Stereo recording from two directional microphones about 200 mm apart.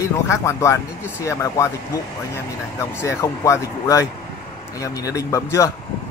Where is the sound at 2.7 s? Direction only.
15° left (ahead or behind).